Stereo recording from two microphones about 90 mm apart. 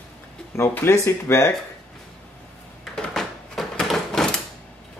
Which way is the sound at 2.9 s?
5° left (ahead or behind).